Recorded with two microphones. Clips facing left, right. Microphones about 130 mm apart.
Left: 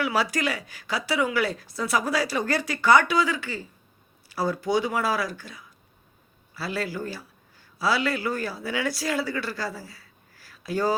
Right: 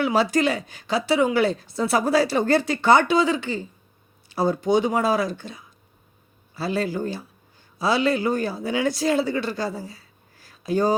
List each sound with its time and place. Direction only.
0.0 s a woman's voice: 25° right (ahead or behind)